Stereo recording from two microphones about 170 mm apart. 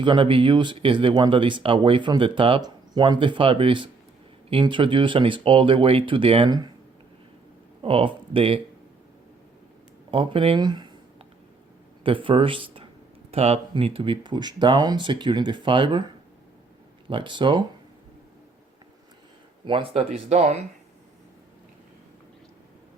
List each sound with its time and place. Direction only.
0.0 s speech: 30° right (ahead or behind)
7.8 s speech: 30° right (ahead or behind)
10.1 s speech: 30° right (ahead or behind)
12.0 s speech: 30° right (ahead or behind)
17.1 s speech: 30° right (ahead or behind)
19.6 s speech: 30° right (ahead or behind)